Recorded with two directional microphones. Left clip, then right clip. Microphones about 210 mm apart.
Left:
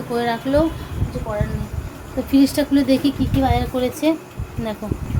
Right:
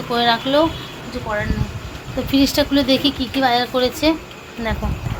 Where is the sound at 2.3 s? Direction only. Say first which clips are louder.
Even; 15° left (ahead or behind).